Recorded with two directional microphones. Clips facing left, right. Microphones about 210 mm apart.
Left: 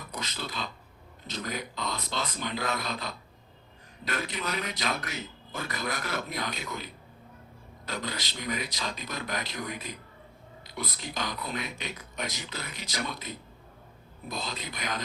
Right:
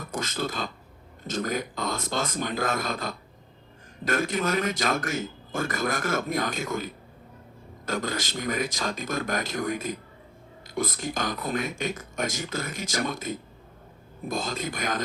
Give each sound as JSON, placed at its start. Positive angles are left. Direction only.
{"t": 0.0, "sound": "a man's voice", "side_deg": -45}